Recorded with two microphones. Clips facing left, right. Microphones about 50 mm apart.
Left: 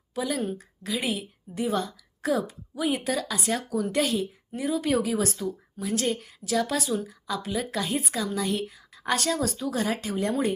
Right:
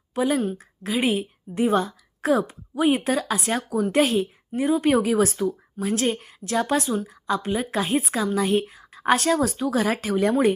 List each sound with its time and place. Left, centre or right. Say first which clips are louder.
0.1 s speech: right 6 dB; right
1.5 s a woman's voice: right 6 dB; right
3.1 s speech: right 5 dB; right
3.5 s a woman's voice: right 4 dB; right
6.1 s a woman's voice: right 3 dB; right
6.5 s speech: right 3 dB; right
7.9 s a woman's voice: right 5 dB; right
9.6 s a woman's voice: right 5 dB; right